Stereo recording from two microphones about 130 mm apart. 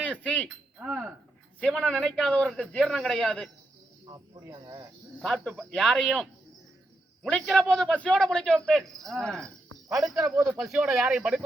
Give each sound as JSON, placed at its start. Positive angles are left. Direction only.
{"t": 0.0, "sound": "a sound", "side_deg": 10}
{"t": 0.8, "sound": "a man's voice", "side_deg": -5}
{"t": 4.0, "sound": "speech", "side_deg": -30}
{"t": 5.2, "sound": "a man's voice", "side_deg": 5}
{"t": 7.3, "sound": "a man's voice", "side_deg": 5}
{"t": 10.2, "sound": "speech", "side_deg": -20}
{"t": 10.5, "sound": "speech", "side_deg": -5}